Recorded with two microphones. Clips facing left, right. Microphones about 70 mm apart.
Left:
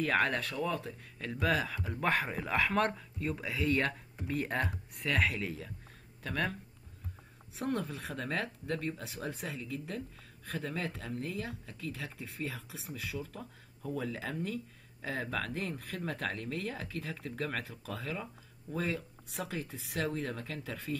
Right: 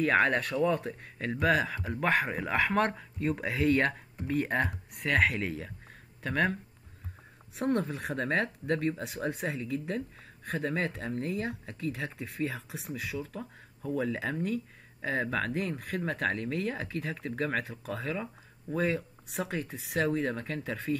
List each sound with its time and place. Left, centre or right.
0.0 s speech: right
5.1 s speech: right
8.1 s speech: right
12.7 s speech: right
13.3 s speech: right
19.2 s speech: right